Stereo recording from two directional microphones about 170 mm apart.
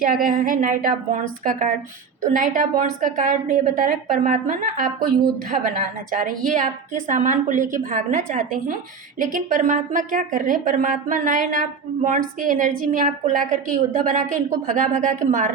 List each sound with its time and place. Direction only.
0.0 s a woman's voice: 55° right (ahead or behind)